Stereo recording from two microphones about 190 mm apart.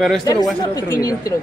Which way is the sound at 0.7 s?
20° left (ahead or behind).